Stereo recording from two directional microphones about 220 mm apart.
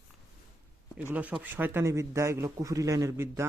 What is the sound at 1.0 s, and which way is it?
Speech, 5° right (ahead or behind).